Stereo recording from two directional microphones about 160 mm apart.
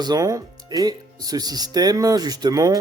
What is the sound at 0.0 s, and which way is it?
Speech, 25° right (ahead or behind).